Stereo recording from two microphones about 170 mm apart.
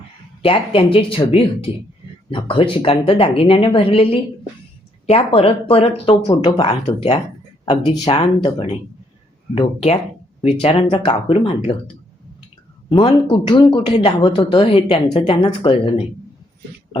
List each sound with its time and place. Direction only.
0.4 s a woman's voice: 30° left (ahead or behind)
13.2 s a woman's voice: 25° left (ahead or behind)